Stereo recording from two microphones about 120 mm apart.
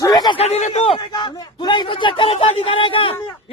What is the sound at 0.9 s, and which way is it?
A man's voice, 40° left (ahead or behind).